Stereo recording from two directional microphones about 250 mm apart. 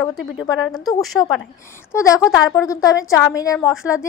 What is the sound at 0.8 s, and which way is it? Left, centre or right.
A woman's voice, centre.